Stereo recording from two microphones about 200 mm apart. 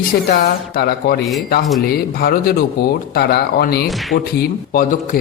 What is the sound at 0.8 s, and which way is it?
Speech, 50° left (ahead or behind).